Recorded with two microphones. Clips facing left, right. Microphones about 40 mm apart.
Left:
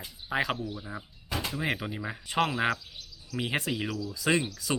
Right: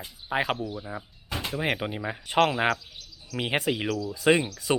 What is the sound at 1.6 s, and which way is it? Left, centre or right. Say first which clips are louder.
Speech: right 6 dB; right.